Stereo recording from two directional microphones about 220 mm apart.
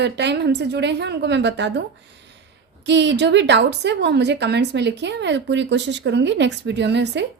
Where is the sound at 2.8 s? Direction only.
55° right (ahead or behind).